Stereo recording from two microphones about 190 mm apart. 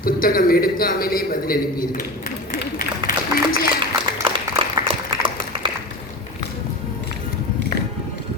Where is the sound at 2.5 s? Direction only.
45° left (ahead or behind).